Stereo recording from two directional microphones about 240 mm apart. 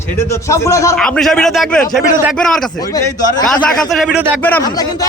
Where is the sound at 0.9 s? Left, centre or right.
Centre.